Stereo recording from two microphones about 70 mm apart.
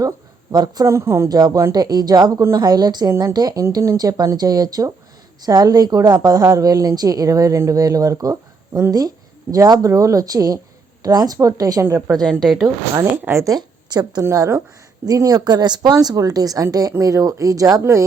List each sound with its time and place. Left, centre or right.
0.5 s a woman's voice: right
0.9 s speech: right
1.3 s a woman's voice: right
3.7 s speech: right
3.9 s a woman's voice: right
6.4 s speech: right
6.7 s speech: right
11.8 s speech: right
12.2 s speech: centre
12.6 s speech: right
13.6 s a sound: right
14.2 s speech: right
15.0 s speech: right